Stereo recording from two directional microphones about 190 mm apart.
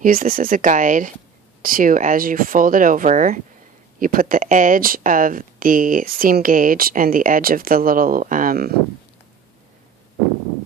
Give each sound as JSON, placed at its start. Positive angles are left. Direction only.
{"t": 0.0, "sound": "speech", "side_deg": -45}